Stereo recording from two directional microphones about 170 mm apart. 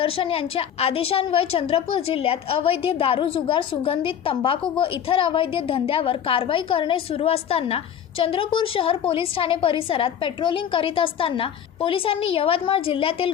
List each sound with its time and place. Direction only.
0.0 s a woman's voice: 30° left (ahead or behind)